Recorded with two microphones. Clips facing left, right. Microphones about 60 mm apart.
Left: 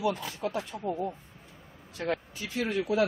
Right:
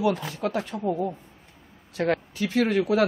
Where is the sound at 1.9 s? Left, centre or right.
Right.